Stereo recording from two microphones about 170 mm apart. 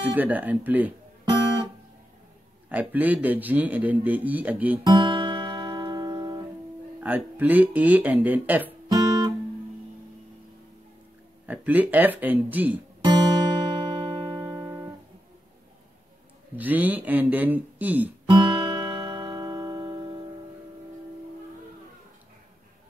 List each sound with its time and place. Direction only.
0.0 s a man's voice: 10° right (ahead or behind)
2.7 s a man's voice: 10° right (ahead or behind)
4.8 s music: 30° right (ahead or behind)
7.0 s a man's voice: 10° right (ahead or behind)
8.8 s guitar: 25° right (ahead or behind)
11.4 s a man's voice: 10° right (ahead or behind)
13.0 s music: 25° right (ahead or behind)
16.5 s a man's voice: 10° right (ahead or behind)
18.3 s music: 25° right (ahead or behind)